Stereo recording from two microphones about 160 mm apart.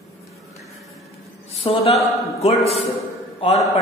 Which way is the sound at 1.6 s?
40° left (ahead or behind).